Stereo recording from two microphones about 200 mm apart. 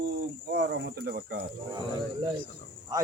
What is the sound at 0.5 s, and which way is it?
Speech, 60° right (ahead or behind).